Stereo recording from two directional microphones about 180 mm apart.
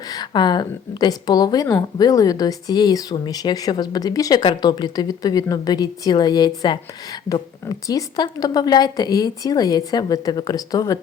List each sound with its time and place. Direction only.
0.1 s a woman's voice: 25° left (ahead or behind)